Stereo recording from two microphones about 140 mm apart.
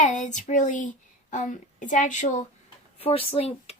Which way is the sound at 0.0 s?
60° left (ahead or behind).